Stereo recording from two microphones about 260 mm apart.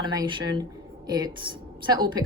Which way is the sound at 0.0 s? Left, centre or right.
Centre.